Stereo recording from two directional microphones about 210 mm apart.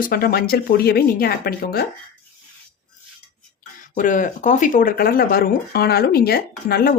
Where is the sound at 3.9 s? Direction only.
40° left (ahead or behind).